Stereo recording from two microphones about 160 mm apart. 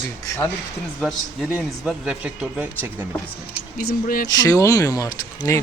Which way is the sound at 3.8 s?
70° left (ahead or behind).